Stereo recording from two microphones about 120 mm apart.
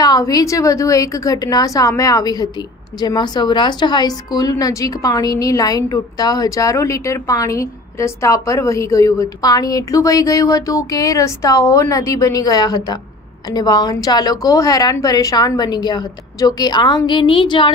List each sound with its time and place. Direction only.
0.0 s a woman's voice: 30° left (ahead or behind)